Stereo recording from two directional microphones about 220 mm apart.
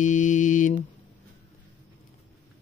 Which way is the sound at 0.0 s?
35° left (ahead or behind).